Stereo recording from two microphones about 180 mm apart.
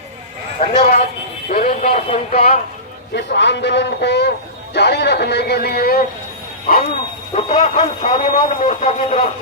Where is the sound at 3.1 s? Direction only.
75° left (ahead or behind); by 5.9 s 60° left (ahead or behind).